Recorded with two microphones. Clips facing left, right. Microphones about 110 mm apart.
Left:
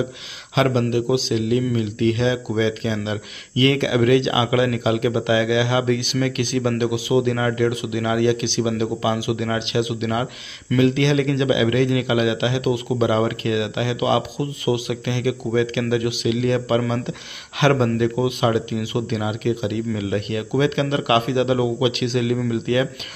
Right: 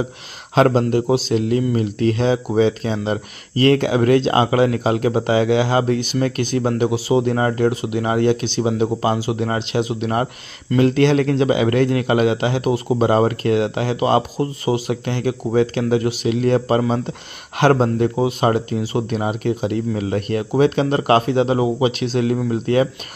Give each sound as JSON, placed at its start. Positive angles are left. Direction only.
{"t": 0.6, "sound": "a man's voice", "side_deg": -40}